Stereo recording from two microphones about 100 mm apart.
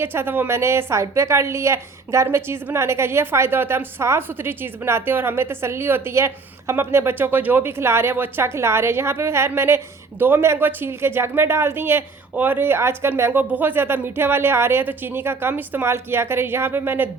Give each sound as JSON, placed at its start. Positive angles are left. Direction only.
{"t": 0.0, "sound": "a woman's voice", "side_deg": -25}